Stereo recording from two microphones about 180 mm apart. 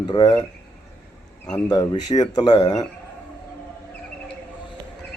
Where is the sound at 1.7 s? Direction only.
20° left (ahead or behind).